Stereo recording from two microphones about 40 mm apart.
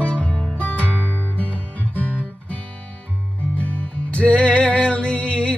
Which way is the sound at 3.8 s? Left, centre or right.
Left.